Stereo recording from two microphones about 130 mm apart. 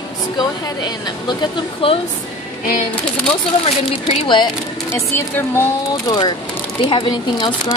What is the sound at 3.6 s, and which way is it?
Speech, 45° left (ahead or behind).